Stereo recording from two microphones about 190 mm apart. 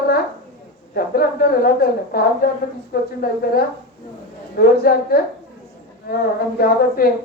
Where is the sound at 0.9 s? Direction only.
50° left (ahead or behind).